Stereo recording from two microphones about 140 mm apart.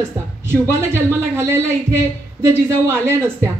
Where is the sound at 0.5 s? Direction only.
20° right (ahead or behind).